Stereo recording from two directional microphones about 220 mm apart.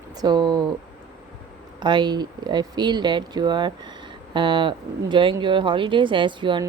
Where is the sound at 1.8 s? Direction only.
20° right (ahead or behind).